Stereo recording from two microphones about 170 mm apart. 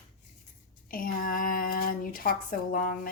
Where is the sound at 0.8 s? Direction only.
55° left (ahead or behind).